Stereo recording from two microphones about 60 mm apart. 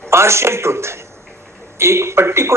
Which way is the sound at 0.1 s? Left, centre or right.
Right.